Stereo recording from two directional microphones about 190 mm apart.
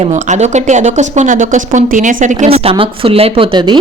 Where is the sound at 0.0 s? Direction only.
35° right (ahead or behind).